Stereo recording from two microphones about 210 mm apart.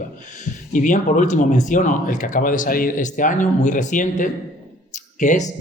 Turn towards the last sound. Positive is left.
turn(degrees=35)  # may be behind; listen again after turning